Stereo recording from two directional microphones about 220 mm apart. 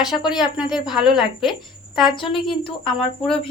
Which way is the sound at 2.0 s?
25° left (ahead or behind).